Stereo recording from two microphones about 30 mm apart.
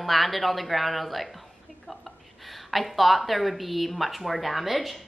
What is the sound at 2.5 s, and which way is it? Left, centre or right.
A woman's voice, centre.